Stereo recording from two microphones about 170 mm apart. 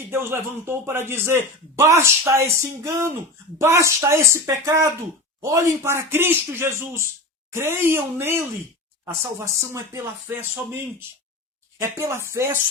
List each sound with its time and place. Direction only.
0.1 s a man's voice: 15° right (ahead or behind)
11.8 s a man's voice: 15° right (ahead or behind)